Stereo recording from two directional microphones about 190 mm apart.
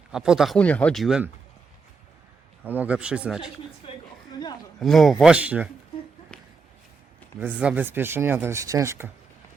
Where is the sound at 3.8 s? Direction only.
25° left (ahead or behind).